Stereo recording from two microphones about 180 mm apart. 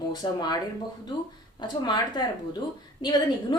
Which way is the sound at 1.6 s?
25° left (ahead or behind).